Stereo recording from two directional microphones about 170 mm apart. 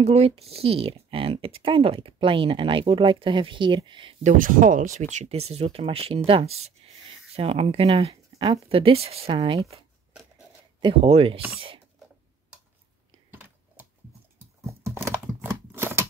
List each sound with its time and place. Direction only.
0.0 s speech: 35° right (ahead or behind)
4.2 s speech: 50° right (ahead or behind)
13.3 s typing: 10° right (ahead or behind)
14.7 s a sound: 15° right (ahead or behind)